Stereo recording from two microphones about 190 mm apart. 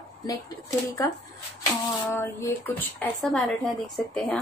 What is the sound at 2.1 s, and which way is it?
A woman's voice, 10° left (ahead or behind).